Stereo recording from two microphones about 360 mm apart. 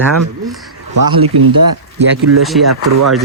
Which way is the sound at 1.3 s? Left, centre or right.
Right.